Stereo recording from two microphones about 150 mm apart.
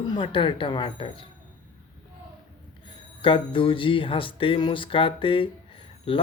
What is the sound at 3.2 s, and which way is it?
Speech, 35° left (ahead or behind).